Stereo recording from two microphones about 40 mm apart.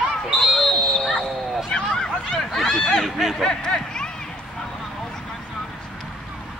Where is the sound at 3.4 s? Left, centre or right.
Centre.